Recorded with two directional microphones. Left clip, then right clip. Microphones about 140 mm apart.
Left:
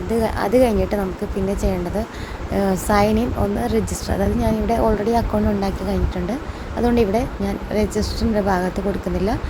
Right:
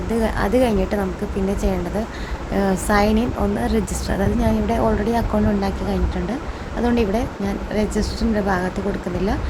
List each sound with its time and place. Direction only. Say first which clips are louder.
0.1 s a woman's voice: left 2 dB; 15° left (ahead or behind)
2.5 s a woman's voice: even; 15° left (ahead or behind)